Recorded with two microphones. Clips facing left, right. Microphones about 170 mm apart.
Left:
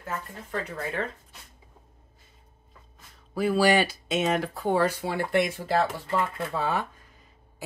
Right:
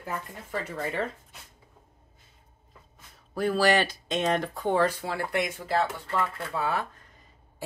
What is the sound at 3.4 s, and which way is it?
Speech, 10° left (ahead or behind).